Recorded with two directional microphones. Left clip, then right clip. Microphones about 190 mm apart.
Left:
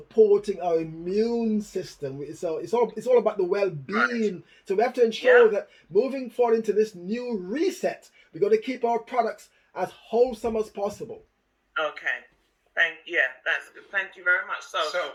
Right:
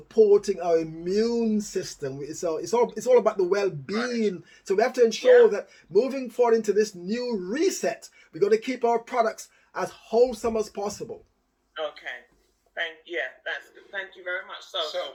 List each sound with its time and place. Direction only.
0.3 s speech: 10° right (ahead or behind)
11.8 s speech: 40° left (ahead or behind)